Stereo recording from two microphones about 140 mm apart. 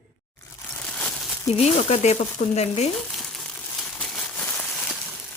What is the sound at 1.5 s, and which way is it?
Speech, 50° left (ahead or behind).